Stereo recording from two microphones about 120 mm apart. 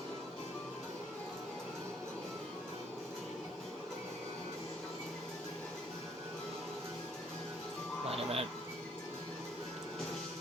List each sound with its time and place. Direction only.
8.0 s music: 55° right (ahead or behind)